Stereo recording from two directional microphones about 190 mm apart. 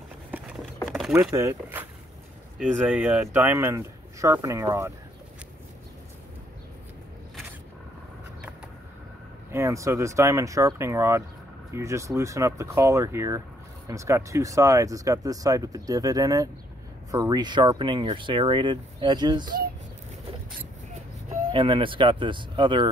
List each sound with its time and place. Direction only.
0.3 s a sound: 5° right (ahead or behind)
1.1 s speech: 15° right (ahead or behind)
9.5 s speech: 15° right (ahead or behind)
19.4 s speech: 50° right (ahead or behind)
21.3 s speech: 25° right (ahead or behind)